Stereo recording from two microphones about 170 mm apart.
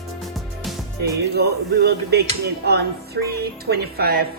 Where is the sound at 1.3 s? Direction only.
70° right (ahead or behind).